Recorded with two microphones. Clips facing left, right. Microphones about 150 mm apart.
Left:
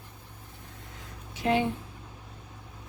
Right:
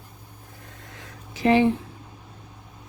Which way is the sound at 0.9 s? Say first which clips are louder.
Right 4 dB; 90° right.